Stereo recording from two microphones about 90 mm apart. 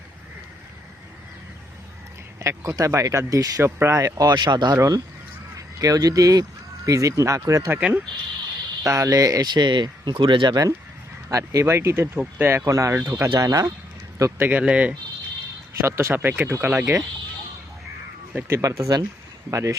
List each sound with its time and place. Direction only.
2.4 s speech: 35° right (ahead or behind)
7.8 s speech: 15° right (ahead or behind)
8.8 s speech: 40° right (ahead or behind); by 10.5 s 70° right (ahead or behind)
10.5 s speech: 40° right (ahead or behind)
13.3 s speech: 40° right (ahead or behind)
14.3 s speech: 20° right (ahead or behind)
15.8 s speech: 30° right (ahead or behind)
18.3 s speech: 25° right (ahead or behind)
18.6 s speech: 40° right (ahead or behind)